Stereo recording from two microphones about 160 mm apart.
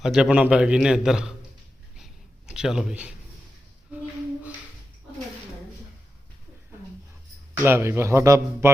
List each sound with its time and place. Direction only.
0.0 s a man's voice: 5° right (ahead or behind)
2.5 s a man's voice: 5° right (ahead or behind)
7.6 s a man's voice: 15° right (ahead or behind)